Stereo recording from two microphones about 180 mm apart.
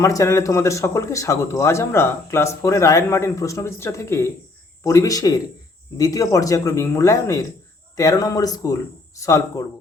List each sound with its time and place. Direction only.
0.0 s speech: 15° left (ahead or behind)